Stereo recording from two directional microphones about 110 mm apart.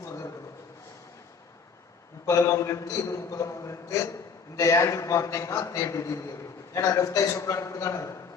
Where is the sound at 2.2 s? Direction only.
30° left (ahead or behind).